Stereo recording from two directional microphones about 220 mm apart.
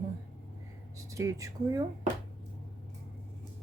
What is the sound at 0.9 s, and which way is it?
Speech, 15° right (ahead or behind).